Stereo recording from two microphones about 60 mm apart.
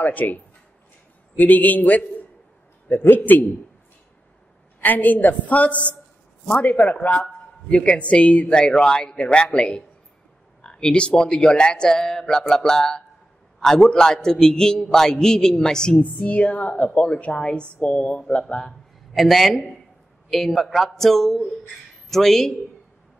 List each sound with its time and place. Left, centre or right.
0.0 s a woman's voice: left
4.7 s a woman's voice: left; by 16.0 s centre
16.0 s a woman's voice: left
19.1 s a man's voice: centre